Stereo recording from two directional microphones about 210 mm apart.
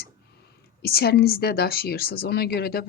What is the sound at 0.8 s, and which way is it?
A woman's voice, 50° left (ahead or behind).